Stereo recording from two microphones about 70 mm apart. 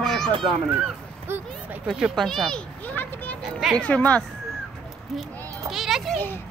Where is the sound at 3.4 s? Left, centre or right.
Centre.